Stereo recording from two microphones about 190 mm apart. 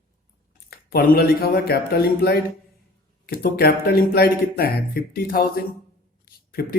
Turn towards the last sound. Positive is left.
turn(degrees=50)  # may be behind; listen again after turning